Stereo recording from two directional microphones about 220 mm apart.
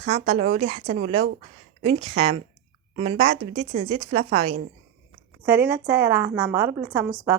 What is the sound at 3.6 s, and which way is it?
Speech, 30° right (ahead or behind).